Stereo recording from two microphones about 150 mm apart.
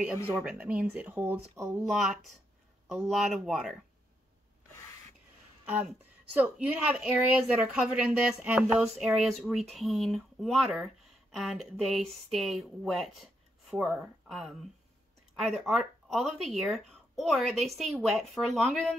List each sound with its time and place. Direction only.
0.4 s speech: 10° right (ahead or behind)
1.9 s speech: centre (ahead or behind)
6.3 s speech: 10° right (ahead or behind)